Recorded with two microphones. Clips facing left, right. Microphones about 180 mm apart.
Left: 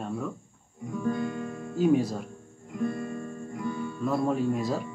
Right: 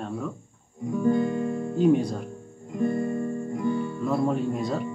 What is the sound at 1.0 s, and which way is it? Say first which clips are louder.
Music: right 6 dB; 20° right (ahead or behind).